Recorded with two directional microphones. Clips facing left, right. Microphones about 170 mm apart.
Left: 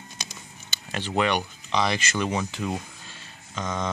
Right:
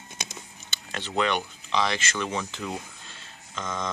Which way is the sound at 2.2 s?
10° left (ahead or behind).